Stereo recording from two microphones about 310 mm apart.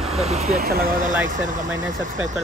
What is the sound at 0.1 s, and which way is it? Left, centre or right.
Speech, centre.